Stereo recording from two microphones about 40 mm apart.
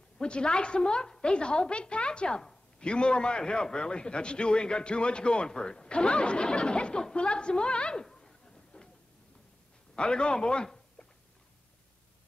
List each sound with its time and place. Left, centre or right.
0.2 s speech: left
9.9 s a man's voice: left